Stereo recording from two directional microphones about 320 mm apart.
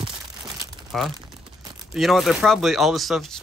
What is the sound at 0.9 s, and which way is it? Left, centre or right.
Speech, centre.